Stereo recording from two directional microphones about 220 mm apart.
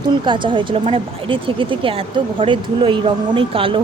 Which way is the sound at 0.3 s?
20° right (ahead or behind).